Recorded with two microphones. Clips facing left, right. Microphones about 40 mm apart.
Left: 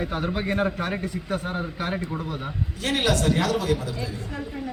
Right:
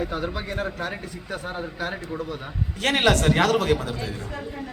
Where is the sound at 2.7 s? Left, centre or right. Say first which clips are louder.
Right 4 dB; right.